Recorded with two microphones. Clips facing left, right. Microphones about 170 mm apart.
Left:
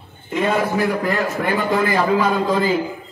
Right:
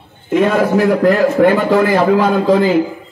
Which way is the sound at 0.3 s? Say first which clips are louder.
Right 7 dB; 80° right.